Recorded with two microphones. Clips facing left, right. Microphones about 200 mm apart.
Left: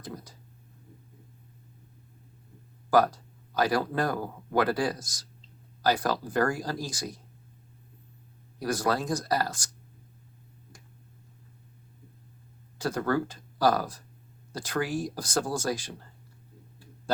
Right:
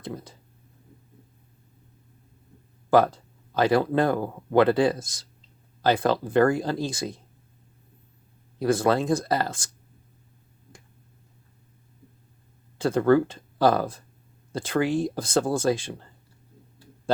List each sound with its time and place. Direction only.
3.5 s speech: 25° right (ahead or behind)
8.5 s speech: 25° right (ahead or behind)
12.8 s speech: 25° right (ahead or behind)